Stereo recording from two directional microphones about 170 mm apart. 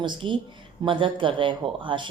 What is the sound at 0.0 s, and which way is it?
Speech, 30° right (ahead or behind).